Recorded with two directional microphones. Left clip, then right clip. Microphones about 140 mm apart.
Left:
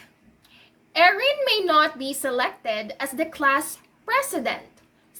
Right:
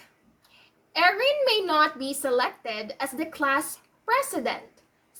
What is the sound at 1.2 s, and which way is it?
A child's voice, 20° left (ahead or behind).